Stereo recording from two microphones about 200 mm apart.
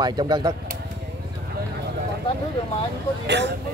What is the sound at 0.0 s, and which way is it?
Speech, 20° right (ahead or behind).